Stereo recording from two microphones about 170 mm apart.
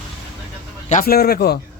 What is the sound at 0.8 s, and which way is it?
Speech, 45° left (ahead or behind).